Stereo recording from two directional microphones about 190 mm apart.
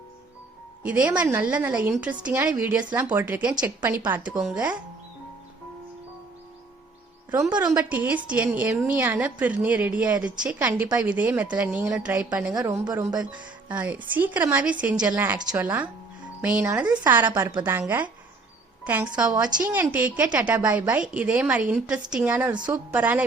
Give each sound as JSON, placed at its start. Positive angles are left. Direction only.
{"t": 0.8, "sound": "a woman's voice", "side_deg": -5}
{"t": 7.5, "sound": "speech", "side_deg": -20}
{"t": 7.8, "sound": "a woman's voice", "side_deg": -5}
{"t": 12.8, "sound": "speech", "side_deg": -20}
{"t": 13.7, "sound": "a woman's voice", "side_deg": -5}